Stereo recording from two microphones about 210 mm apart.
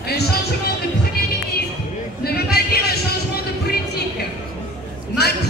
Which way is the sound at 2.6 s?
50° left (ahead or behind).